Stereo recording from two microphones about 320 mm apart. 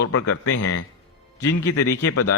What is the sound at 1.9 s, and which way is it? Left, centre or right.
Mantra, left.